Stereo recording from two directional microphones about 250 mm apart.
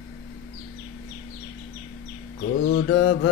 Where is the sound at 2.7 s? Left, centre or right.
Left.